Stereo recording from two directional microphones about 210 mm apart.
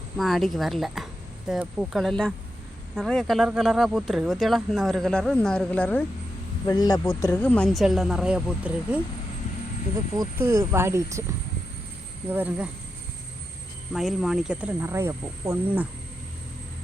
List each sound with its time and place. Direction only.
0.2 s speech: centre (ahead or behind)
6.7 s speech: 20° left (ahead or behind); by 9.0 s 5° right (ahead or behind)
10.2 s speech: 10° right (ahead or behind)
12.3 s speech: 10° right (ahead or behind)
13.9 s speech: centre (ahead or behind)